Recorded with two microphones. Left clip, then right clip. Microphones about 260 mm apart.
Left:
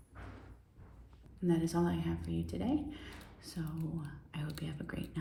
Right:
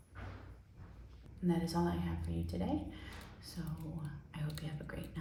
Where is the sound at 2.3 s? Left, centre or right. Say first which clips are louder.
Left 3 dB; left.